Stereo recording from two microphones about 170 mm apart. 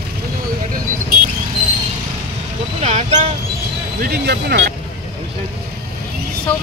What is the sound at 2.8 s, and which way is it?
Speech, 40° right (ahead or behind).